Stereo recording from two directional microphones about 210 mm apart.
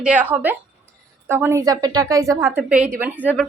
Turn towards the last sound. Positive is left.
turn(degrees=-10)  # may be behind; listen again after turning